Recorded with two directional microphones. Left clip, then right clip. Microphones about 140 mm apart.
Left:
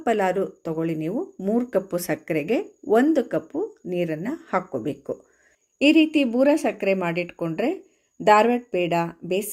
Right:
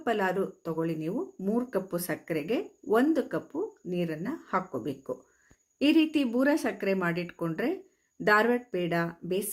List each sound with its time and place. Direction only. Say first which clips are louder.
0.0 s speech: left 6 dB; 35° left (ahead or behind)
5.8 s a woman's voice: left 7 dB; 20° left (ahead or behind)